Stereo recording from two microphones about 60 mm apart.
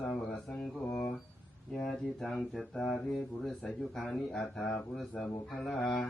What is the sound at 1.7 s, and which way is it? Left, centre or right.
Speech, centre.